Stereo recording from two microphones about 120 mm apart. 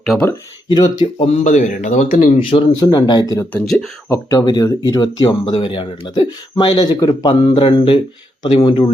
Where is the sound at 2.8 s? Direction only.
35° left (ahead or behind).